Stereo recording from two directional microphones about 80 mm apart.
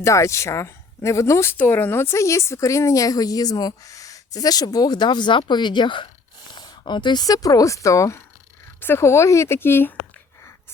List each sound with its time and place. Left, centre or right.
0.0 s speech: left
1.5 s speech: left
6.5 s a sound: left
7.3 s speech: left